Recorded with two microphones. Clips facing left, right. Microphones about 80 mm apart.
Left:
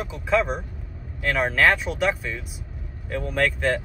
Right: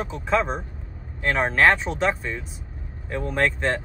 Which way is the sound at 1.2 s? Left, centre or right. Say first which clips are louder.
Right 1 dB; right.